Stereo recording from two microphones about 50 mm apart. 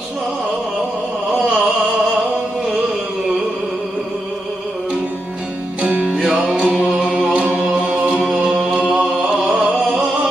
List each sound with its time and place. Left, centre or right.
5.8 s music: right
6.8 s chant: right
7.3 s singing: right
8.3 s music: right
8.9 s a sound: right
9.6 s music: right